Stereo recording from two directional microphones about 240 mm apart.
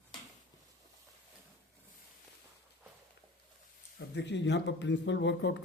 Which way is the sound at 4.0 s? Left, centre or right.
Left.